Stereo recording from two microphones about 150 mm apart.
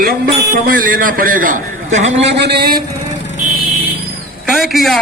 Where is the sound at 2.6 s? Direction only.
80° right.